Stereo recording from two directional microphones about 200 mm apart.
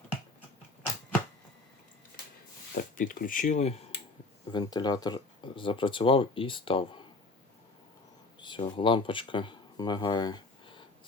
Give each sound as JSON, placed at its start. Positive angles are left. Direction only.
{"t": 2.9, "sound": "speech", "side_deg": 45}
{"t": 4.4, "sound": "speech", "side_deg": 20}
{"t": 8.4, "sound": "speech", "side_deg": 25}